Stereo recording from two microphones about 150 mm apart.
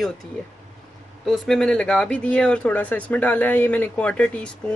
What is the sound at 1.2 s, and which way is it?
Speech, centre (ahead or behind).